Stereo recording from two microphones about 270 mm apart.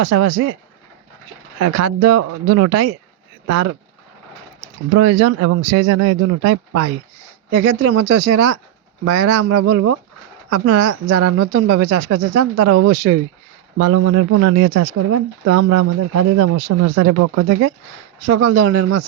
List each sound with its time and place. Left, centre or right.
0.0 s speech: right
1.6 s speech: right
4.9 s speech: right
13.7 s speech: right
18.3 s speech: right